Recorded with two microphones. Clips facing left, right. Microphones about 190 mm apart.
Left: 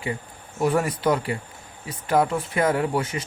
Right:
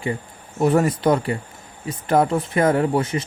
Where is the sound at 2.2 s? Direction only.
35° right (ahead or behind).